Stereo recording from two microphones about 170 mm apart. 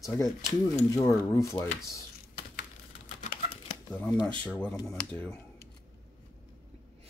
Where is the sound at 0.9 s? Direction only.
15° left (ahead or behind).